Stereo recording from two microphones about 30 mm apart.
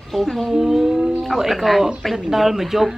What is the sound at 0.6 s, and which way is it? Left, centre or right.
A man's voice, centre.